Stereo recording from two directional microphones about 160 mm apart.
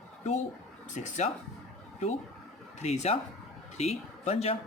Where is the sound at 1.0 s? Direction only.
50° left (ahead or behind).